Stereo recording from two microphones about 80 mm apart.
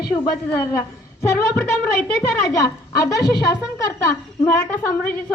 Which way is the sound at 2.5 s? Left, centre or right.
Left.